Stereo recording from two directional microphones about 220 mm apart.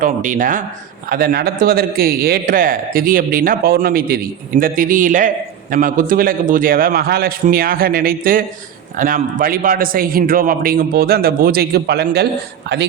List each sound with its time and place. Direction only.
0.0 s a man's voice: 35° right (ahead or behind)